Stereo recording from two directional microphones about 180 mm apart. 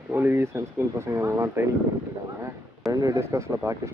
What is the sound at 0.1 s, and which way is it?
Speech, 10° right (ahead or behind).